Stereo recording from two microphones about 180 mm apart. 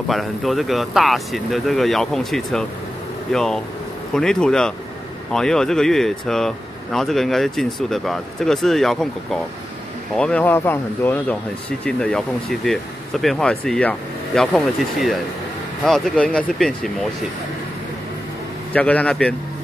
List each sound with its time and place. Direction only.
0.1 s speech: centre (ahead or behind)
18.7 s speech: 10° left (ahead or behind)